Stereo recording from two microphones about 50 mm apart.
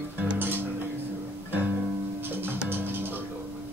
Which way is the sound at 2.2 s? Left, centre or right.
Right.